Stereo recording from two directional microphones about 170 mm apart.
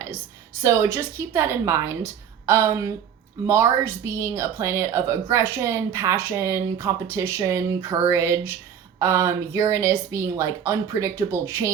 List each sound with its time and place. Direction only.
0.6 s a woman's voice: 15° right (ahead or behind)